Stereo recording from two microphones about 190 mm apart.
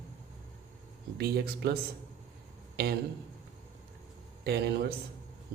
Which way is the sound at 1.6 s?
55° right (ahead or behind).